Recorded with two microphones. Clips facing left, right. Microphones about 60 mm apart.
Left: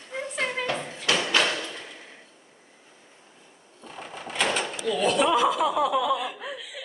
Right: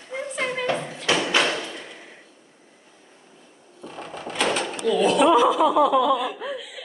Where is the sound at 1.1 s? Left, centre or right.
Right.